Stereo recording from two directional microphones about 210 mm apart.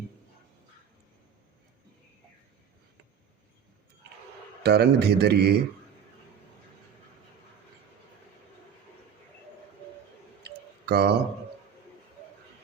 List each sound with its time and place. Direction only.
4.6 s a man's voice: 50° right (ahead or behind)
10.4 s tick-tock: 50° right (ahead or behind)